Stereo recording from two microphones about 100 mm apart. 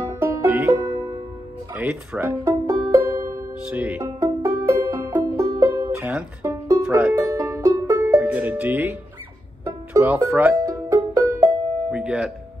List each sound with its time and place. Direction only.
0.2 s music: 30° right (ahead or behind)
0.8 s music: 40° right (ahead or behind)
1.7 s music: 15° right (ahead or behind); by 3.4 s 35° right (ahead or behind)
3.6 s music: 15° right (ahead or behind)
4.2 s music: 35° right (ahead or behind)
5.3 s music: 40° right (ahead or behind)
6.4 s music: 30° right (ahead or behind)
7.0 s music: 15° right (ahead or behind)
7.2 s music: 30° right (ahead or behind)
8.2 s music: 15° right (ahead or behind)
9.9 s speech: 20° right (ahead or behind)
10.6 s music: 35° right (ahead or behind)
11.1 s music: 25° right (ahead or behind)
11.9 s music: 10° right (ahead or behind)